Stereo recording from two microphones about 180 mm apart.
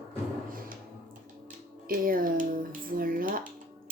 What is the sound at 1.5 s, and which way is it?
Music, 50° right (ahead or behind).